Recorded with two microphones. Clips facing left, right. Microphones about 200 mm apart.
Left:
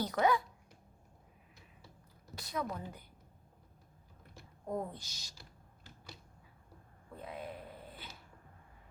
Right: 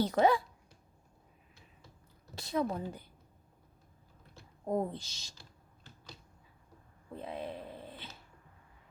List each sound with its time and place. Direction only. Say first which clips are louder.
0.0 s speech: right 4 dB; 30° right (ahead or behind)
2.3 s speech: right 6 dB; 25° right (ahead or behind)
4.6 s speech: right 6 dB; 25° right (ahead or behind)
7.1 s a sound: right 4 dB; 30° right (ahead or behind)